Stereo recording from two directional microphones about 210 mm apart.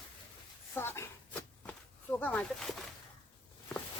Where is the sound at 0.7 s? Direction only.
10° left (ahead or behind).